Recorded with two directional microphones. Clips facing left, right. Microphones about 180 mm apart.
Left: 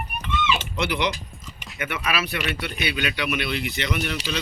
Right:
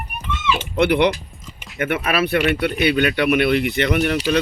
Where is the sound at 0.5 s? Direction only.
55° right (ahead or behind).